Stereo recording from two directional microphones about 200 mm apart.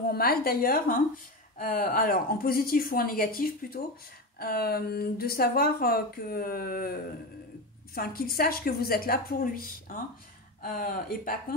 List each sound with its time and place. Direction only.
0.1 s speech: 50° left (ahead or behind)